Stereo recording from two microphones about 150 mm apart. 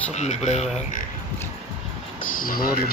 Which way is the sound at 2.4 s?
75° left (ahead or behind).